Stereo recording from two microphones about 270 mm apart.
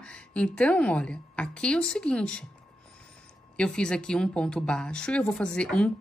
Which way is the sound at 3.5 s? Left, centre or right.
Centre.